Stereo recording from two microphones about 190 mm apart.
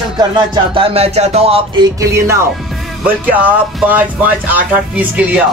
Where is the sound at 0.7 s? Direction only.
30° right (ahead or behind).